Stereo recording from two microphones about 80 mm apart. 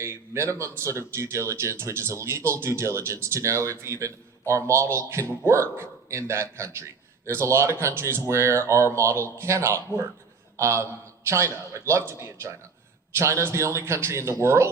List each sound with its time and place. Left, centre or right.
0.0 s a man's voice: right